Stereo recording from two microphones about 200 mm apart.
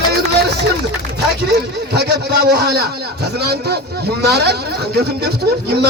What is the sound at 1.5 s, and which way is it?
A man's voice, 55° right (ahead or behind).